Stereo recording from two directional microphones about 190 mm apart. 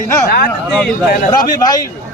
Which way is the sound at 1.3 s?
20° left (ahead or behind).